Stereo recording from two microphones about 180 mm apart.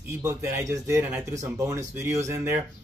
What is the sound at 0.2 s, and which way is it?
Speech, 15° right (ahead or behind).